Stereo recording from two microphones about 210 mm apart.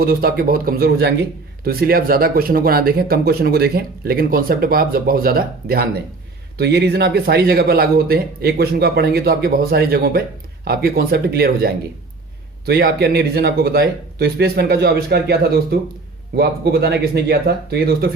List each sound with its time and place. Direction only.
0.0 s a man's voice: 45° right (ahead or behind)